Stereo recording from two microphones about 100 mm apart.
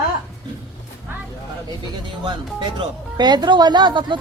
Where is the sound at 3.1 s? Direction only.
45° right (ahead or behind).